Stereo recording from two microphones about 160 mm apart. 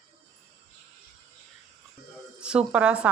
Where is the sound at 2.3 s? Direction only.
5° right (ahead or behind).